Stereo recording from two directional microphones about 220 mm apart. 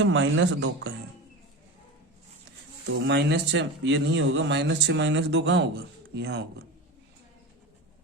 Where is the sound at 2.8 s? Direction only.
50° right (ahead or behind).